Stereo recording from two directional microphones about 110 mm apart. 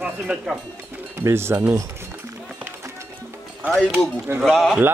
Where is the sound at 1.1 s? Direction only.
25° right (ahead or behind).